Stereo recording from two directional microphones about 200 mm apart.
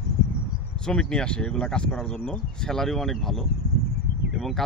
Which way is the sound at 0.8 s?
5° left (ahead or behind).